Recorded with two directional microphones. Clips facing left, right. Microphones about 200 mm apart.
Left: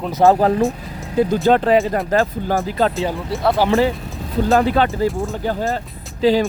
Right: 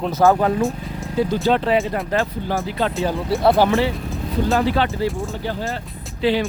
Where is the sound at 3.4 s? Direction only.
25° right (ahead or behind).